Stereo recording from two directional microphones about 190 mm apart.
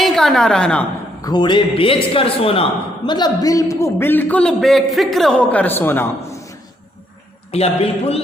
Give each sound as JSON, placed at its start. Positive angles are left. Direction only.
{"t": 0.0, "sound": "a woman's voice", "side_deg": 0}
{"t": 1.2, "sound": "a man's voice", "side_deg": 20}
{"t": 7.5, "sound": "a man's voice", "side_deg": 30}